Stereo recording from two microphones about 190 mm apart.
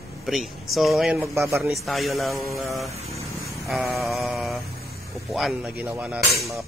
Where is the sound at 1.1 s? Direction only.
10° right (ahead or behind).